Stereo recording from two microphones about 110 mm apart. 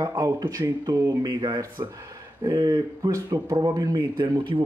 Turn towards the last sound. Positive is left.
turn(degrees=-40)  # may be behind; listen again after turning